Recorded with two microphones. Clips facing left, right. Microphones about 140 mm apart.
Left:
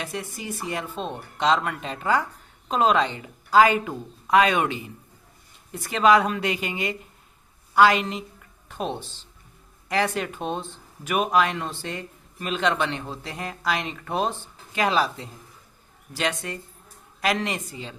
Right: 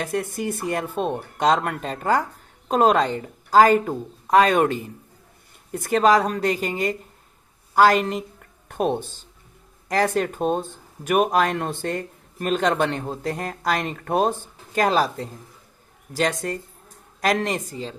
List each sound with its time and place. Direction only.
0.0 s a woman's voice: 50° right (ahead or behind)